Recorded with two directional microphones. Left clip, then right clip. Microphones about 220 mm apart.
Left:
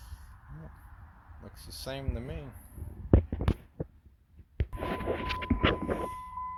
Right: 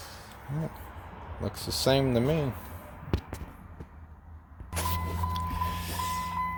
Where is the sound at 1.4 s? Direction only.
10° right (ahead or behind).